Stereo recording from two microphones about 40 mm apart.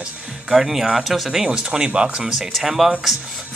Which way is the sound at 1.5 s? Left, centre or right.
Right.